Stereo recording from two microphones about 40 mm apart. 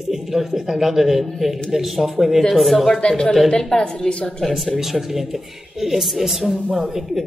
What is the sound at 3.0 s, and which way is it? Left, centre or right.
A woman's voice, left.